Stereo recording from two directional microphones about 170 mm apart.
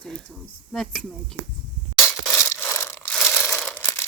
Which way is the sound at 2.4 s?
15° left (ahead or behind).